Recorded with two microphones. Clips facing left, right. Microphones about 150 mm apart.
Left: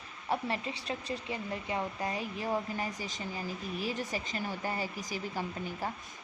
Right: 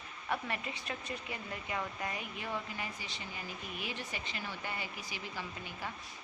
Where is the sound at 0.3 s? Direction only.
30° left (ahead or behind).